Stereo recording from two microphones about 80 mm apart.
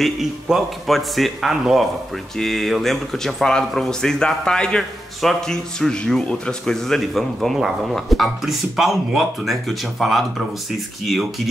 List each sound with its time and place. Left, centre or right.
0.0 s a man's voice: centre